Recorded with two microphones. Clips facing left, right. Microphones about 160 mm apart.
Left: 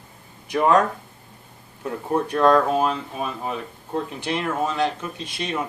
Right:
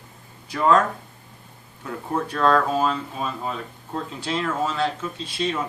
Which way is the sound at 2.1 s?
15° left (ahead or behind).